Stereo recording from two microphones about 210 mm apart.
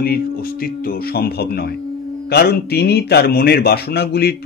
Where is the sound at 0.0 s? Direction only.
45° left (ahead or behind).